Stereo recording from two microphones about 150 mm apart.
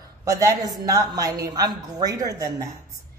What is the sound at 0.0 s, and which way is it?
A man's voice, 25° right (ahead or behind).